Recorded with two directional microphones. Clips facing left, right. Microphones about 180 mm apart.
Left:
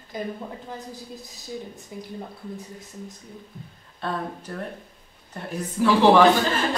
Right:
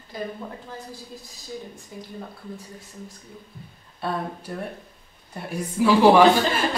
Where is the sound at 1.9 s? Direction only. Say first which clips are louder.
Left 2 dB; 20° left (ahead or behind).